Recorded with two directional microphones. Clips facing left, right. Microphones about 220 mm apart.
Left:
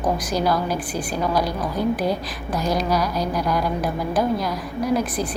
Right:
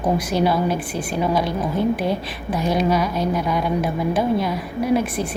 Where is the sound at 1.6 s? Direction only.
25° right (ahead or behind).